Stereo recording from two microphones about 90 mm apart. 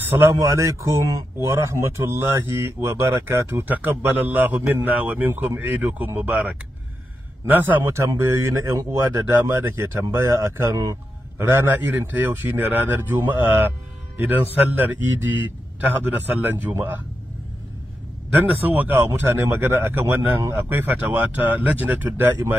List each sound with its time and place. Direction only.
0.4 s speech: 35° right (ahead or behind); by 7.8 s 20° right (ahead or behind)
7.8 s a man's voice: 35° right (ahead or behind)
11.5 s speech: 20° right (ahead or behind)
18.3 s speech: 20° right (ahead or behind)